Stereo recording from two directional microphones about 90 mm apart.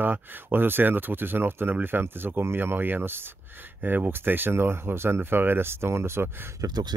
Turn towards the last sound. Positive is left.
turn(degrees=-50)  # may be behind; listen again after turning